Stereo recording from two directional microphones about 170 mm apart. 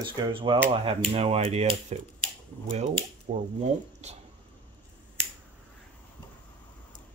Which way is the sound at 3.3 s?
40° right (ahead or behind).